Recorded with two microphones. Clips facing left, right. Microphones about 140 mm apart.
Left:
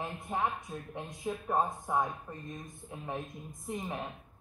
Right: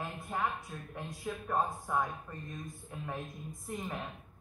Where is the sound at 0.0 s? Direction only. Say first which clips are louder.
Left 2 dB; 20° left (ahead or behind).